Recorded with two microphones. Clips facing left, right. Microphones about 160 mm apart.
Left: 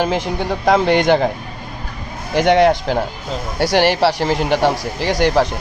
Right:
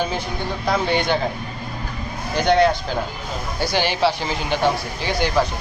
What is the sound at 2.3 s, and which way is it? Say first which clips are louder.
A man's voice: left 4 dB; 90° left.